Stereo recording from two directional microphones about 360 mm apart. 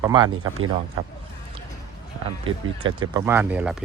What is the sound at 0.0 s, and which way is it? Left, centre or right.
Speech, centre.